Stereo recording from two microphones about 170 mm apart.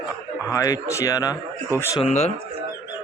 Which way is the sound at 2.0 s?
40° left (ahead or behind).